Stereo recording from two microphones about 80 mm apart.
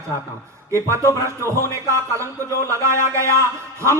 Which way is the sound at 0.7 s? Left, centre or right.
Right.